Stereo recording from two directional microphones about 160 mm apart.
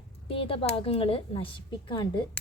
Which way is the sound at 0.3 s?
35° left (ahead or behind).